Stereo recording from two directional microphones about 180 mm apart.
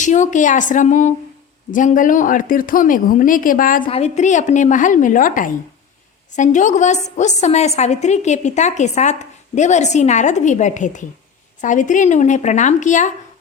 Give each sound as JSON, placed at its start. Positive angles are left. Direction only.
{"t": 0.0, "sound": "a woman's voice", "side_deg": 45}
{"t": 3.8, "sound": "a woman's voice", "side_deg": 35}